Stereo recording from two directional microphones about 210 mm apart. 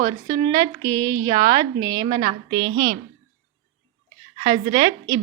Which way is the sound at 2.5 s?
75° right (ahead or behind).